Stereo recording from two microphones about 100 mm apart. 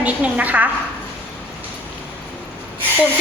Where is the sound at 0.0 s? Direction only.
15° right (ahead or behind).